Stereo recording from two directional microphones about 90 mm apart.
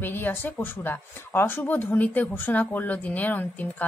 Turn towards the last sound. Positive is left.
turn(degrees=20)  # may be behind; listen again after turning